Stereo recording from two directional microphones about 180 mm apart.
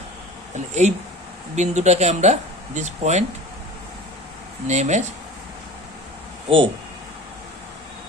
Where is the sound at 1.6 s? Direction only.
40° right (ahead or behind).